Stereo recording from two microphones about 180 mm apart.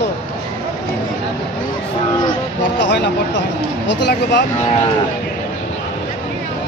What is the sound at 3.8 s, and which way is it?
Speech, 75° left (ahead or behind).